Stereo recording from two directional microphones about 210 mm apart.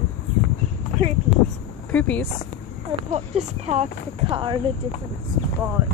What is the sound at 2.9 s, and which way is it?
Speech, 30° right (ahead or behind).